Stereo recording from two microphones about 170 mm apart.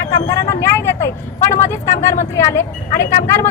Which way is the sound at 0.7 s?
15° left (ahead or behind).